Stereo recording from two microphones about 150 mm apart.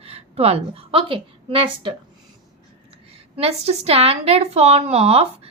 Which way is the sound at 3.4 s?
45° right (ahead or behind).